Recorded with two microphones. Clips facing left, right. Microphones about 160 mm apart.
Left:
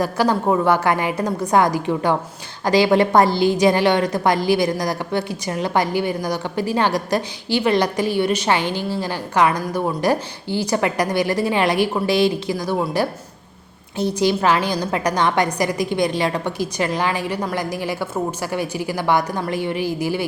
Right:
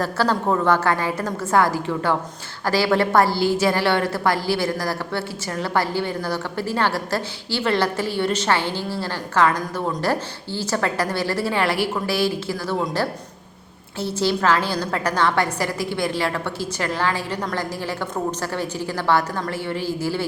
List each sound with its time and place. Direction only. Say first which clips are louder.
0.0 s a woman's voice: left 3 dB; 15° left (ahead or behind)
14.0 s a woman's voice: left 3 dB; 15° left (ahead or behind)